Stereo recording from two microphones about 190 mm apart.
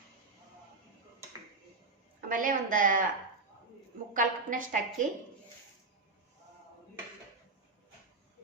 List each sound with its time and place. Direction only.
2.3 s a woman's voice: 45° right (ahead or behind)
4.1 s a woman's voice: 45° right (ahead or behind)